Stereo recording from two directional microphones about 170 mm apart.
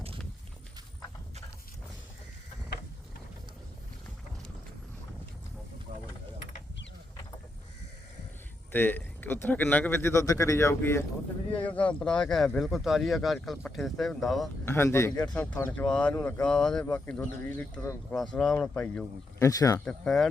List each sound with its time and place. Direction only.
8.7 s speech: 10° left (ahead or behind)
14.6 s speech: 15° left (ahead or behind)
19.8 s speech: 5° left (ahead or behind)